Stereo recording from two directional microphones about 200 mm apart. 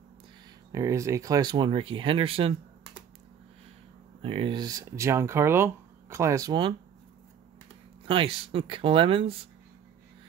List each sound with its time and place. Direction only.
0.7 s speech: 15° right (ahead or behind)
4.2 s speech: 25° right (ahead or behind)
8.0 s speech: 25° right (ahead or behind)